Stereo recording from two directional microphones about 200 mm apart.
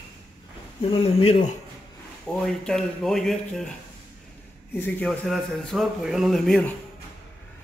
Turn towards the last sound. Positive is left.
turn(degrees=0)  # may be behind; listen again after turning